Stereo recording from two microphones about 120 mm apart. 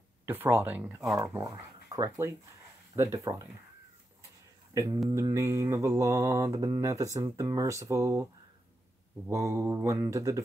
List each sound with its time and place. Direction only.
0.2 s speech: 20° right (ahead or behind)
1.4 s speech: 30° right (ahead or behind)
3.0 s mantra: 25° right (ahead or behind)
4.7 s mantra: 25° right (ahead or behind)
9.3 s mantra: 25° right (ahead or behind)